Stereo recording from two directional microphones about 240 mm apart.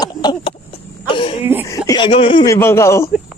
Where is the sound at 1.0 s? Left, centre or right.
Left.